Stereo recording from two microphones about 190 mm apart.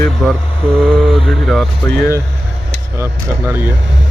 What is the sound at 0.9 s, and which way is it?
Mantra, centre (ahead or behind).